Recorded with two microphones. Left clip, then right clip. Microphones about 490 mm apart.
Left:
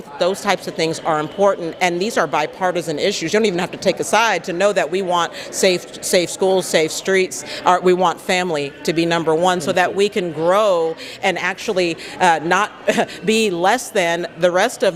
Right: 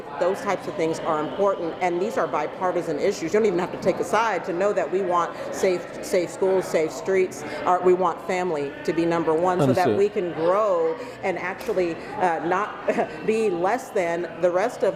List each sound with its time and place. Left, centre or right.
0.2 s a man's voice: left